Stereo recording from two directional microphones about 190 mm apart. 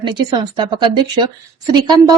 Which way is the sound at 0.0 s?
25° right (ahead or behind).